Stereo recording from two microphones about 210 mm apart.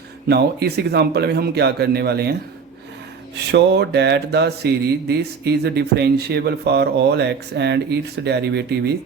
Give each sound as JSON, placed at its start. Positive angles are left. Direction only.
{"t": 0.3, "sound": "mantra", "side_deg": -50}
{"t": 3.3, "sound": "mantra", "side_deg": -55}